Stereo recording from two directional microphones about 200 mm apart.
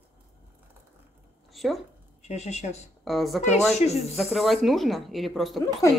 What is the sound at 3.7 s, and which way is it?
Speech, 35° left (ahead or behind).